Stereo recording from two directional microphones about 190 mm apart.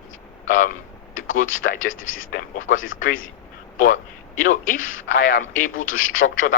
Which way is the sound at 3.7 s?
45° left (ahead or behind).